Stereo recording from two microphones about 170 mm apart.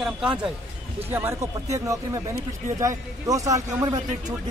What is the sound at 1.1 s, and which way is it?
A man's voice, 15° right (ahead or behind).